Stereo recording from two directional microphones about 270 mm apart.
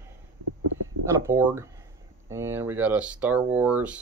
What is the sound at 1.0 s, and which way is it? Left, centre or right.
Speech, centre.